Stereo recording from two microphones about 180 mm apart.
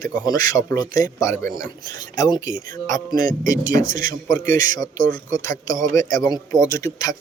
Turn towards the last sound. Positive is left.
turn(degrees=20)  # may be behind; listen again after turning